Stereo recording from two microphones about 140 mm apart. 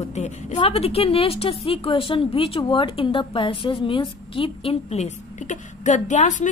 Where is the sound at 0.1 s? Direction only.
55° left (ahead or behind).